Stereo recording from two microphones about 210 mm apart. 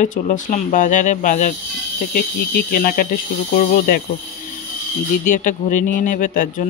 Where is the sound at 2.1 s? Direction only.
45° left (ahead or behind).